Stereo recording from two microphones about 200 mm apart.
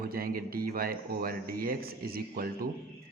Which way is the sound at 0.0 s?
50° right (ahead or behind).